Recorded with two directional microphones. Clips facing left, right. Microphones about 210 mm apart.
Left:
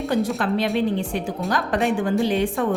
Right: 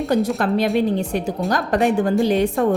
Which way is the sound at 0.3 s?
40° right (ahead or behind).